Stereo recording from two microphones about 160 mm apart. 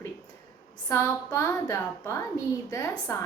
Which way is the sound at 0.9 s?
20° left (ahead or behind).